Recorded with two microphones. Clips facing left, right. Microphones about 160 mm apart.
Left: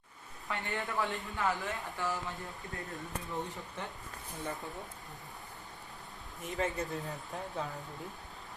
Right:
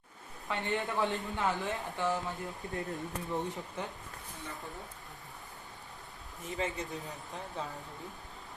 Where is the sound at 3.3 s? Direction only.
20° right (ahead or behind).